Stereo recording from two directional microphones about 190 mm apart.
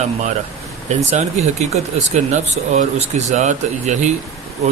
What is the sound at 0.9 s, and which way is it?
Speech, 35° right (ahead or behind).